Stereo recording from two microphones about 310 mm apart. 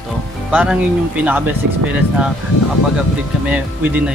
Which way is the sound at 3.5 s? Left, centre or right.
Centre.